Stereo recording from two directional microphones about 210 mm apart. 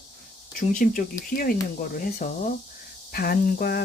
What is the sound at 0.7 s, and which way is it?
Speech, 40° left (ahead or behind).